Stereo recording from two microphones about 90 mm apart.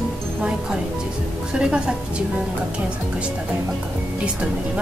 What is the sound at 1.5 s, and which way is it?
Speech, 10° right (ahead or behind).